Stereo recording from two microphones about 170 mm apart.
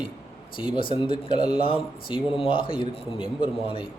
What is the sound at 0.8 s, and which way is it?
A man's voice, 30° left (ahead or behind).